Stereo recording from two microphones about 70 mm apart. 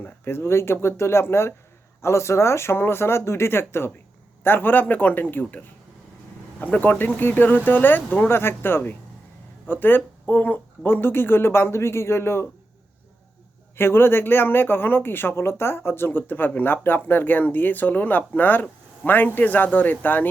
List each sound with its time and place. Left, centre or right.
0.0 s speech: left
13.7 s speech: left